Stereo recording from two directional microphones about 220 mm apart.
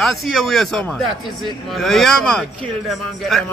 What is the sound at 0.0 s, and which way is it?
Speech, centre (ahead or behind).